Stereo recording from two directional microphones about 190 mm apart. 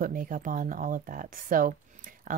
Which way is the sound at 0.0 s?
45° right (ahead or behind).